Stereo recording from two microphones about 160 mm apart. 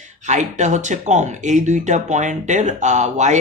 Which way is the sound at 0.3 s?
50° right (ahead or behind).